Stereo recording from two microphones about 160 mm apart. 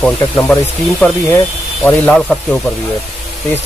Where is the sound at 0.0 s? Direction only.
5° left (ahead or behind).